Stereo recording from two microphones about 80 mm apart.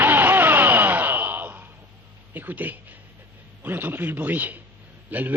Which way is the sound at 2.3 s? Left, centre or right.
Right.